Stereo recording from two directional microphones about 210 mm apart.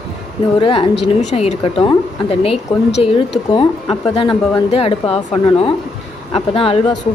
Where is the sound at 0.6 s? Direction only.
25° left (ahead or behind).